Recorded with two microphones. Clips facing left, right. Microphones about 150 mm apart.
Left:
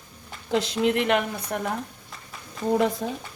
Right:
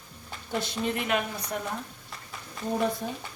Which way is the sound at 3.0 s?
90° left.